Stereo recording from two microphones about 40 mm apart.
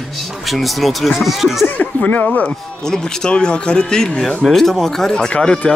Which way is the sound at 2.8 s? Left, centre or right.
Centre.